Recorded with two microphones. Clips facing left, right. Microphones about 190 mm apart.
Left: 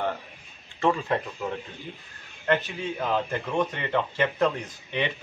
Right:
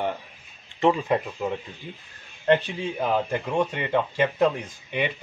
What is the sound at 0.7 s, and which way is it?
Speech, 20° right (ahead or behind).